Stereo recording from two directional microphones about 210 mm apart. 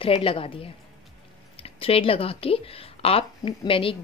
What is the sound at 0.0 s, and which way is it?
A woman's voice, 25° left (ahead or behind).